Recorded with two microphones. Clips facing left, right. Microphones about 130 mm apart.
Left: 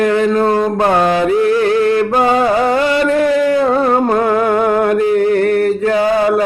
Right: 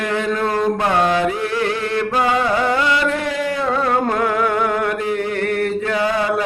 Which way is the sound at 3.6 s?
35° left (ahead or behind).